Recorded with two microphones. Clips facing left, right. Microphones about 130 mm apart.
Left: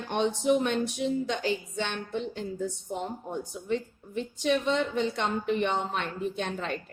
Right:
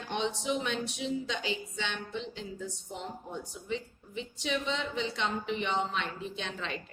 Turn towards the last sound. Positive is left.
turn(degrees=50)  # may be behind; listen again after turning